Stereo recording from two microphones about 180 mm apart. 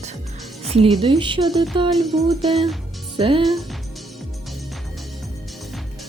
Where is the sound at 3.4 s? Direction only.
Centre (ahead or behind).